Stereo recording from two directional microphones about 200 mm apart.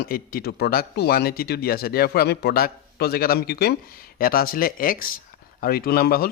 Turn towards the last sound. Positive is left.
turn(degrees=50)  # may be behind; listen again after turning